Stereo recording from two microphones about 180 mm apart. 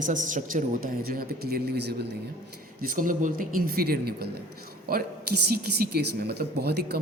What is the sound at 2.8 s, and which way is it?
Speech, 50° right (ahead or behind).